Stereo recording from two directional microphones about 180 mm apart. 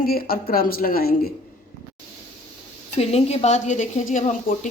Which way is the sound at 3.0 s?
35° left (ahead or behind).